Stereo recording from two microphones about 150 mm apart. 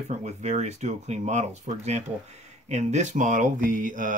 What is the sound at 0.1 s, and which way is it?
Speech, 50° right (ahead or behind).